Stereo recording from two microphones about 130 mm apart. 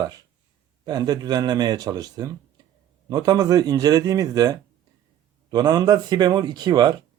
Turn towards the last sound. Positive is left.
turn(degrees=-30)  # may be behind; listen again after turning